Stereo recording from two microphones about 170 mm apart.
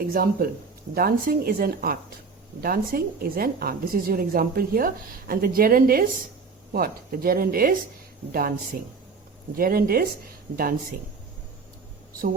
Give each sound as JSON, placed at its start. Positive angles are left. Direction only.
{"t": 0.1, "sound": "a woman's voice", "side_deg": -60}